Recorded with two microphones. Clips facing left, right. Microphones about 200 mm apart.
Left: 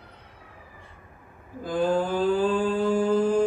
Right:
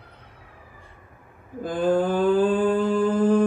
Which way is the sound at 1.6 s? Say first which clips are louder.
Right 3 dB; 55° right (ahead or behind).